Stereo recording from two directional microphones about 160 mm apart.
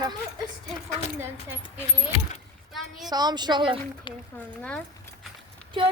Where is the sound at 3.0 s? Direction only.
25° right (ahead or behind).